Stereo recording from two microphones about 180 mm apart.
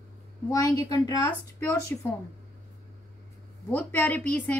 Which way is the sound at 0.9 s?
25° left (ahead or behind).